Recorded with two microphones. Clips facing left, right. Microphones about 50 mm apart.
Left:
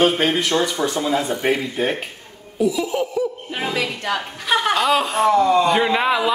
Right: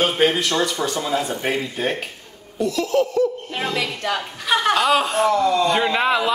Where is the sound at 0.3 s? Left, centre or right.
Centre.